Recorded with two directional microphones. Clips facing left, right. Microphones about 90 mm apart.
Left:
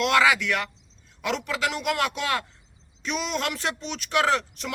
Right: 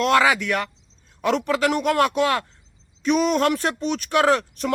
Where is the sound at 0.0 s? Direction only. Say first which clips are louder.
Right 3 dB; 35° right (ahead or behind).